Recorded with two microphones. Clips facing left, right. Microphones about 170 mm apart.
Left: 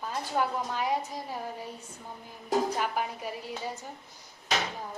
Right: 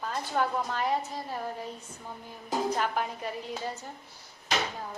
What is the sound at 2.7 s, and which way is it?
A woman's voice, 10° left (ahead or behind).